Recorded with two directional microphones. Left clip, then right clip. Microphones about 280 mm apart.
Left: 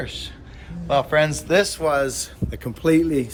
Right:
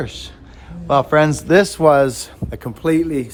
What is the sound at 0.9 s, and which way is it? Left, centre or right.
A man's voice, right.